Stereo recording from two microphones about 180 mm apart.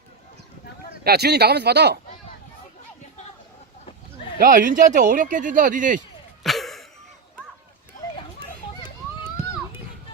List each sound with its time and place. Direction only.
1.0 s speech: 65° right (ahead or behind)
4.4 s speech: 50° right (ahead or behind)
6.4 s a sound: centre (ahead or behind)